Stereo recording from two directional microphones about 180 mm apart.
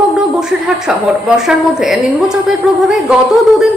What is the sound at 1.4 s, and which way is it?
A woman's voice, 5° right (ahead or behind).